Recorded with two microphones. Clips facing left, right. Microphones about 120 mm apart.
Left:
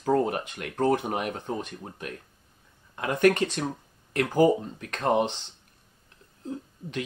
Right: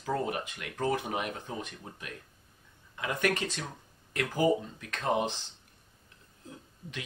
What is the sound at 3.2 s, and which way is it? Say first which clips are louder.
Speech: left 10 dB; 45° left (ahead or behind).